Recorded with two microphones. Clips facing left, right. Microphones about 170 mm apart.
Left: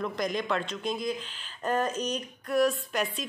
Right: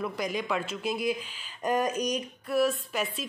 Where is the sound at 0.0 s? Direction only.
10° right (ahead or behind).